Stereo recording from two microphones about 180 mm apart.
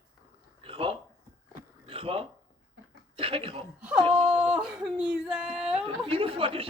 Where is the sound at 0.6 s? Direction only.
30° right (ahead or behind).